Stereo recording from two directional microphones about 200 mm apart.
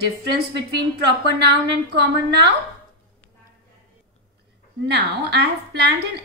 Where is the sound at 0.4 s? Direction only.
55° right (ahead or behind).